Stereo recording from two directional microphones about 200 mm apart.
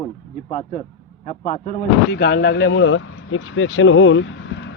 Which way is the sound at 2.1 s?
55° left (ahead or behind).